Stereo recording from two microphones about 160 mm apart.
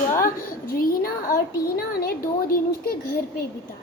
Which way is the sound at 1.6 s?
70° left (ahead or behind).